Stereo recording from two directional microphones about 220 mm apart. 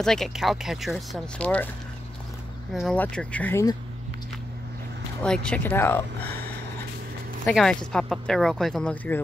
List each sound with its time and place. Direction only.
0.0 s speech: centre (ahead or behind)
2.7 s speech: centre (ahead or behind)
5.2 s speech: 5° left (ahead or behind)
7.4 s speech: 5° left (ahead or behind)